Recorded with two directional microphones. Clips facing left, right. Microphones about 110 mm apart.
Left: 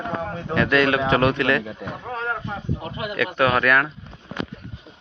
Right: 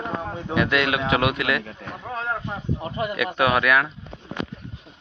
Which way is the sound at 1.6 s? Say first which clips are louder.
Left 4 dB; 10° left (ahead or behind).